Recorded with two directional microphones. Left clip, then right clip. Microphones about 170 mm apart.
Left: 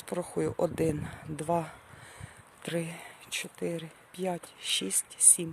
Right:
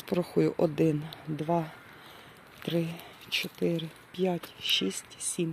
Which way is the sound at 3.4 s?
Centre (ahead or behind).